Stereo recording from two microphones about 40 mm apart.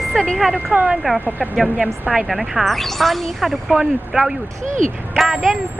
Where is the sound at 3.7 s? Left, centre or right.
Centre.